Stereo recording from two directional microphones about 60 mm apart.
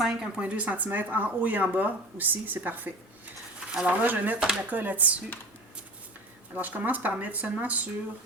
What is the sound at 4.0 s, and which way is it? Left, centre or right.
Speech, right.